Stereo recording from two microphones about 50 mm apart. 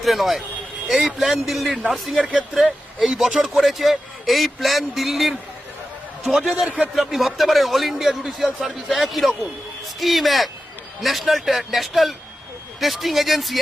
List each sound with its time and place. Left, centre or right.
0.0 s a man's voice: centre
2.1 s a man's voice: centre